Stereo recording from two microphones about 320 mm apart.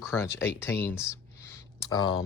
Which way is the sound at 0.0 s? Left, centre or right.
Centre.